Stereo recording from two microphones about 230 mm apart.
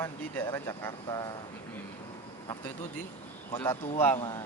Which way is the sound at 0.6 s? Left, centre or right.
Centre.